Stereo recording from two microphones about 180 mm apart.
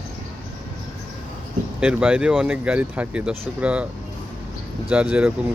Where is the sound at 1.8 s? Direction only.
5° right (ahead or behind).